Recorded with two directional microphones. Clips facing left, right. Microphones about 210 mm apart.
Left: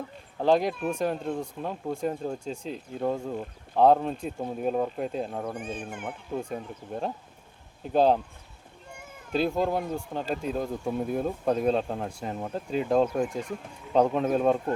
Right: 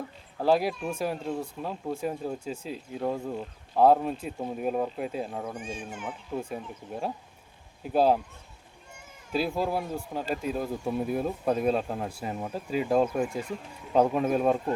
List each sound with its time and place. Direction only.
0.4 s speech: 5° right (ahead or behind)
5.5 s speech: 60° left (ahead or behind)
6.4 s speech: centre (ahead or behind)
9.3 s speech: 5° right (ahead or behind)